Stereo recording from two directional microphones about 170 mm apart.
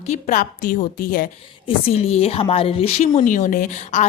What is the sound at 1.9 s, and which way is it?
Speech, 35° left (ahead or behind).